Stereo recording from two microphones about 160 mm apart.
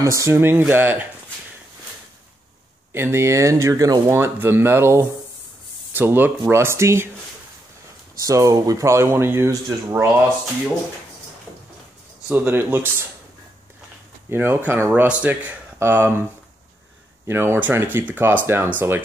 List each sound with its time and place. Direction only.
0.0 s speech: 20° right (ahead or behind)
2.9 s speech: 15° right (ahead or behind)
8.2 s speech: 20° right (ahead or behind)
12.3 s speech: 10° right (ahead or behind)
14.3 s speech: 15° right (ahead or behind)
17.3 s speech: 15° right (ahead or behind)